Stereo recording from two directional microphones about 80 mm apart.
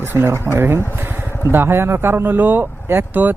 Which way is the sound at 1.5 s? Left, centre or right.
Right.